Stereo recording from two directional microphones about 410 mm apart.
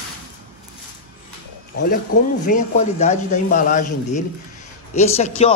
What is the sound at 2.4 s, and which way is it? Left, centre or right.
A man's voice, centre.